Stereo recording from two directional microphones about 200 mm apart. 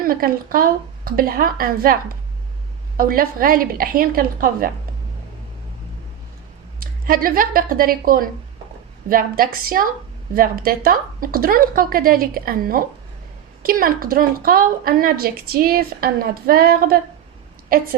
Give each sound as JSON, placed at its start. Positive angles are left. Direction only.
{"t": 0.0, "sound": "a woman's voice", "side_deg": -45}
{"t": 6.7, "sound": "a woman's voice", "side_deg": -45}